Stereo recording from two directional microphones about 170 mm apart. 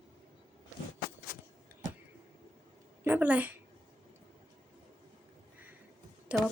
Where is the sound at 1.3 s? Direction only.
55° left (ahead or behind).